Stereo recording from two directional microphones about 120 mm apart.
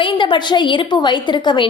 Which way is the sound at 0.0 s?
45° left (ahead or behind).